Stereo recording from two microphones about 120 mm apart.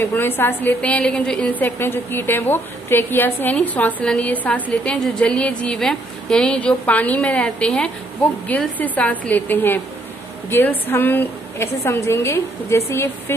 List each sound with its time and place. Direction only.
0.0 s a woman's voice: 15° left (ahead or behind)